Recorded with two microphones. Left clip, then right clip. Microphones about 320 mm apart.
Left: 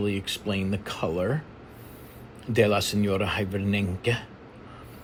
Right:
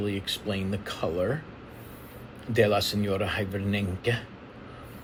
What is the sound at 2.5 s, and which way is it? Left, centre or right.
Speech, centre.